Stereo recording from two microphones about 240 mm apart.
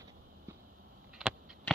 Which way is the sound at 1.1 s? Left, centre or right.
Centre.